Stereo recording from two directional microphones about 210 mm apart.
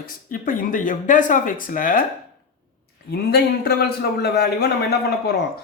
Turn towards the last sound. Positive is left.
turn(degrees=50)  # may be behind; listen again after turning